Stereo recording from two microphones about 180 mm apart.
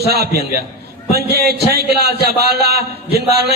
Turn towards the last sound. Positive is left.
turn(degrees=-65)  # may be behind; listen again after turning